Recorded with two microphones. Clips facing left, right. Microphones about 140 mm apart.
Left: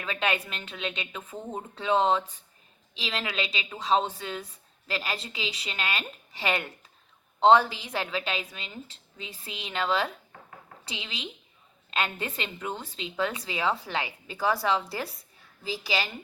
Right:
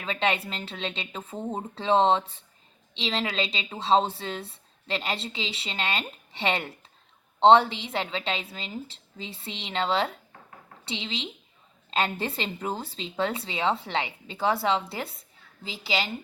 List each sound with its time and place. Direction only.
0.0 s a woman's voice: 25° right (ahead or behind)